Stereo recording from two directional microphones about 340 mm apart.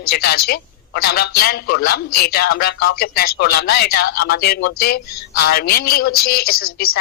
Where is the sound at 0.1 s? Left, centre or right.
Left.